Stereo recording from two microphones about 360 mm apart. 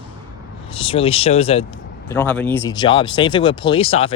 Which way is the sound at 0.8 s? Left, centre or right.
Centre.